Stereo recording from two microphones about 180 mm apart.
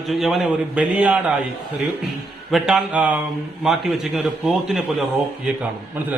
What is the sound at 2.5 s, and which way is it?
A man's voice, centre (ahead or behind).